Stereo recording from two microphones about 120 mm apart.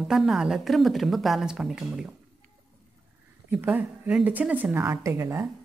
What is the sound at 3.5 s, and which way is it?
Speech, 15° right (ahead or behind).